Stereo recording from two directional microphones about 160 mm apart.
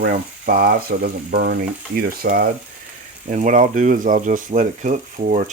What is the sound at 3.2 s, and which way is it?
Speech, 50° right (ahead or behind).